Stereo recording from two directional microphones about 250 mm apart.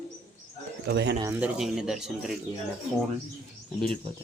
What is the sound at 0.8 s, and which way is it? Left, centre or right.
Speech, right.